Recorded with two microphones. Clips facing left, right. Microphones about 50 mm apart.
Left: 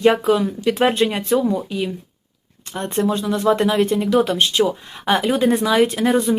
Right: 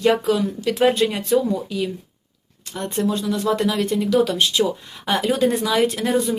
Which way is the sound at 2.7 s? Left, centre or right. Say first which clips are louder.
Left 2 dB; left.